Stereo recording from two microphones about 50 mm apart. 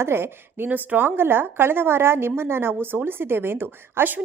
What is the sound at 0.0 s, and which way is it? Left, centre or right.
Speech, right.